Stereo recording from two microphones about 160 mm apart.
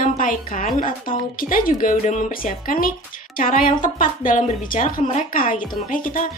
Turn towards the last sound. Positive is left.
turn(degrees=55)  # may be behind; listen again after turning